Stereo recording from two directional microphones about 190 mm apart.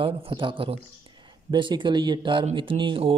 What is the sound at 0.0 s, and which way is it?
Speech, 30° right (ahead or behind).